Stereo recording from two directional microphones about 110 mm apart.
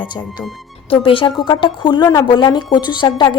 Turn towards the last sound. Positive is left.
turn(degrees=45)  # may be behind; listen again after turning